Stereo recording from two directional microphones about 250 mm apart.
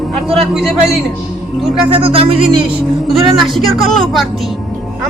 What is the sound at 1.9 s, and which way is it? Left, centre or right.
Speech, right.